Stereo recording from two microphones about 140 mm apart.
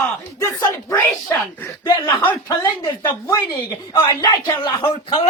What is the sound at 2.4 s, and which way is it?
Speech, 30° left (ahead or behind).